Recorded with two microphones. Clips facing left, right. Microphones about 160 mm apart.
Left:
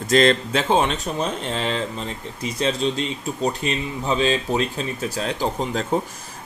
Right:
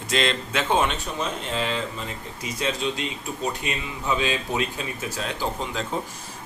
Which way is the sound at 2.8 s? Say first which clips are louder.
Left 5 dB; 35° left (ahead or behind).